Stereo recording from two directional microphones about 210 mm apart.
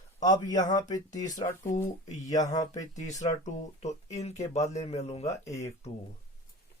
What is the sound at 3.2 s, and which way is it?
Speech, 35° left (ahead or behind).